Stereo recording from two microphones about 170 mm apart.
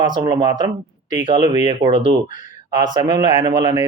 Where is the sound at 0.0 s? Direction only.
25° right (ahead or behind).